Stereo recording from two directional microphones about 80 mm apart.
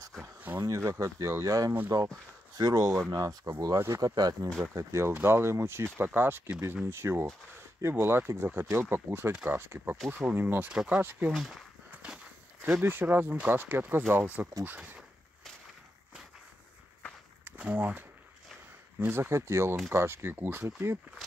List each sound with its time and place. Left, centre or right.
0.6 s speech: right
3.7 s speech: right
4.0 s speech: right
4.5 s speech: centre
4.7 s speech: right
10.7 s speech: centre
11.0 s speech: right
11.3 s speech: centre
11.9 s walk: centre
12.8 s speech: right
17.5 s speech: centre